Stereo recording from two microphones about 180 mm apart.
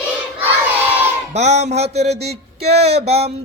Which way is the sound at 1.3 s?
40° right (ahead or behind).